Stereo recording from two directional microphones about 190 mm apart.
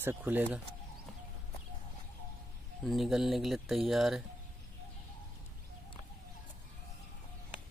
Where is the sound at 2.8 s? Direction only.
Centre (ahead or behind).